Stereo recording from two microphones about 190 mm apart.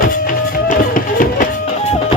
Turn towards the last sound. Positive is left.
turn(degrees=45)  # may be behind; listen again after turning